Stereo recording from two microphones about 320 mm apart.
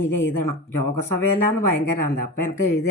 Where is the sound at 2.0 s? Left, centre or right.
Left.